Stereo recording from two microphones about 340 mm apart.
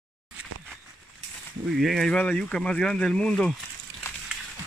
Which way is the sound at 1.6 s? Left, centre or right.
Centre.